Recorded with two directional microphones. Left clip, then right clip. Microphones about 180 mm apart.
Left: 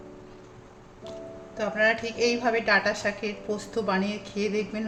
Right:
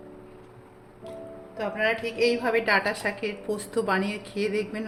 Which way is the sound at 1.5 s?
5° left (ahead or behind).